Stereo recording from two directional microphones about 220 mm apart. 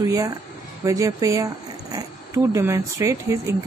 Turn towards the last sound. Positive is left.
turn(degrees=-15)  # may be behind; listen again after turning